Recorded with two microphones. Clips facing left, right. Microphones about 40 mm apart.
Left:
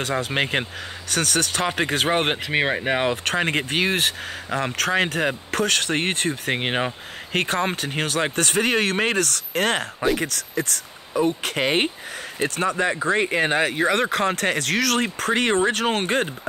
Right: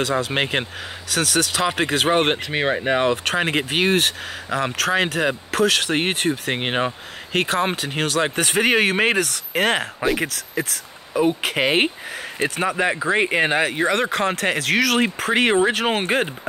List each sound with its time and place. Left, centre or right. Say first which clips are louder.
0.0 s speech: right 3 dB; centre
0.3 s speech: right 1 dB; centre
2.4 s speech: right 1 dB; centre; by 13.6 s right
13.6 s speech: right 1 dB; centre